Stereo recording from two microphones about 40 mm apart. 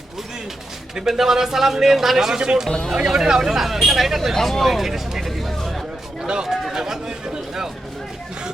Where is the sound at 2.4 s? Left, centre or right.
Centre.